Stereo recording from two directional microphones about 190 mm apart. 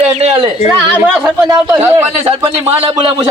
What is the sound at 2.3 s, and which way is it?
Speech, 30° right (ahead or behind).